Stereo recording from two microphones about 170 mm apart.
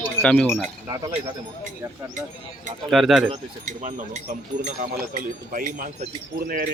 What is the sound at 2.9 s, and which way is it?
Speech, centre (ahead or behind).